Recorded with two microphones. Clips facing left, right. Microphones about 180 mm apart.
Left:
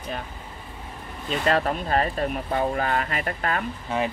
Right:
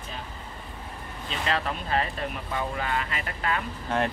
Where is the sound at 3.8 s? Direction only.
Centre (ahead or behind).